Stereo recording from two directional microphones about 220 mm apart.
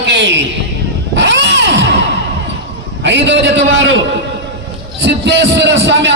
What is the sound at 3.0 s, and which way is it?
Speech, 55° right (ahead or behind).